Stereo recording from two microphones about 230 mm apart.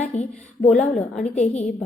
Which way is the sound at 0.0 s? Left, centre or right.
Left.